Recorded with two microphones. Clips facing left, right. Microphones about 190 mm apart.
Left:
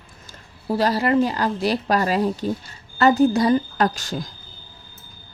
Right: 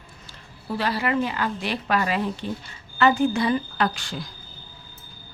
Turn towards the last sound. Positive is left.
turn(degrees=40)  # may be behind; listen again after turning